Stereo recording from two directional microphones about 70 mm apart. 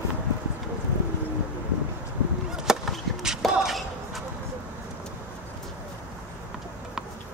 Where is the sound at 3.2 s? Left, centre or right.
Centre.